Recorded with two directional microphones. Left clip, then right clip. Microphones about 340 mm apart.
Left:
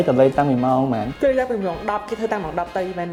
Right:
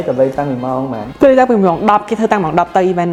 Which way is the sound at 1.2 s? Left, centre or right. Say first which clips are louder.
Right 12 dB; right.